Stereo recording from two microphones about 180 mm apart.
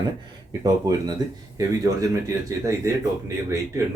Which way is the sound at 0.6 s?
20° right (ahead or behind).